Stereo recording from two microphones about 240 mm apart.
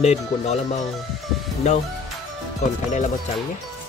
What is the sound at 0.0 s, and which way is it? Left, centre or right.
Speech, left.